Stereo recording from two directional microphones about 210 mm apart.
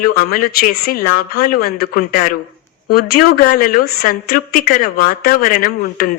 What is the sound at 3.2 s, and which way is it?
Speech, 45° left (ahead or behind).